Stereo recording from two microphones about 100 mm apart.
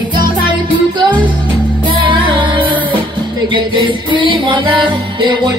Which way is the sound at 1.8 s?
55° right (ahead or behind).